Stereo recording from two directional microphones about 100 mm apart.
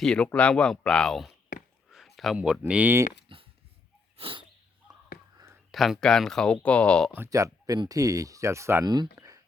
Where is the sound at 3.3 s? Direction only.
60° right (ahead or behind).